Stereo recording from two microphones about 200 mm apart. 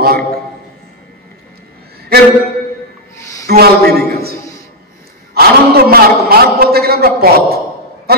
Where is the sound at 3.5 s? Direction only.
50° right (ahead or behind).